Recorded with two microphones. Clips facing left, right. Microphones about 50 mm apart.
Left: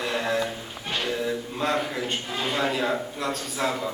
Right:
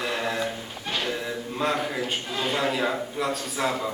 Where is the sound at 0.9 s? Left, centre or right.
Centre.